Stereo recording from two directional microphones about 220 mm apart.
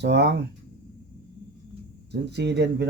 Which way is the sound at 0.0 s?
50° right (ahead or behind).